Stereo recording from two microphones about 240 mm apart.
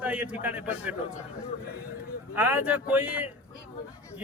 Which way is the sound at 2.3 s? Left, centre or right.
Centre.